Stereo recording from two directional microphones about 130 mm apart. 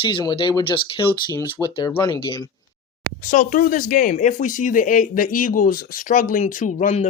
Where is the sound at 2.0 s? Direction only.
35° left (ahead or behind).